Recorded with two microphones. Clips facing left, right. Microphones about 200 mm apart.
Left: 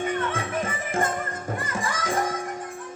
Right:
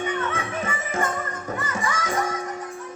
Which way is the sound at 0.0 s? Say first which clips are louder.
Even; 50° left (ahead or behind).